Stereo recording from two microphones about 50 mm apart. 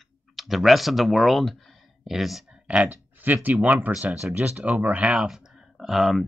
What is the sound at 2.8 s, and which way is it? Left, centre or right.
Speech, right.